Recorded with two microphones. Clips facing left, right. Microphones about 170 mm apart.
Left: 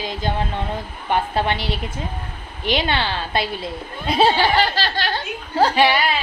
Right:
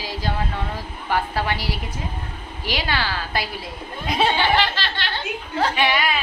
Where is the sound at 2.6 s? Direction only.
25° left (ahead or behind).